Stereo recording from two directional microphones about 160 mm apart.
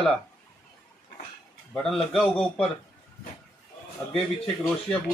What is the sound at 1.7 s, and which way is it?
Speech, centre (ahead or behind).